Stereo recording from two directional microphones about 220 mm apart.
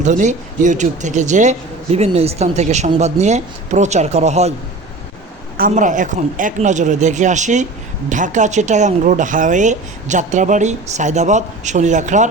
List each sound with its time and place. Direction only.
0.0 s a man's voice: 35° right (ahead or behind)
5.5 s a man's voice: 35° right (ahead or behind)